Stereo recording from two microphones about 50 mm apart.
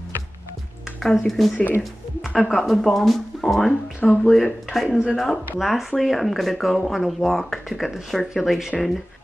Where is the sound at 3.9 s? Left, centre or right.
Left.